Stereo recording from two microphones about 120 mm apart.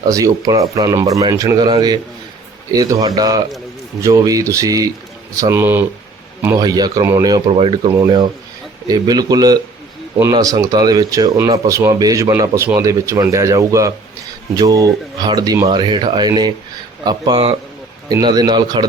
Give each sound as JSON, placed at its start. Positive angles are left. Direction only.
{"t": 0.1, "sound": "speech", "side_deg": -30}
{"t": 2.7, "sound": "speech", "side_deg": -30}
{"t": 6.6, "sound": "speech", "side_deg": -35}
{"t": 7.4, "sound": "speech", "side_deg": -45}
{"t": 7.9, "sound": "speech", "side_deg": -30}